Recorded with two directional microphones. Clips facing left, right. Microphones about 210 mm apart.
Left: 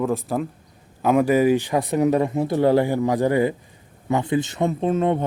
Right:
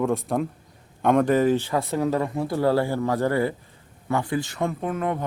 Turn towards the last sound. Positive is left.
turn(degrees=25)  # may be behind; listen again after turning